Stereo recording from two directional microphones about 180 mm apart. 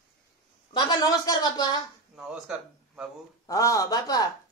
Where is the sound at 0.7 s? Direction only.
25° left (ahead or behind).